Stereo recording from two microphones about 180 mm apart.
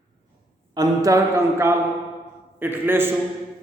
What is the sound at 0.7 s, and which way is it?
Speech, 20° right (ahead or behind).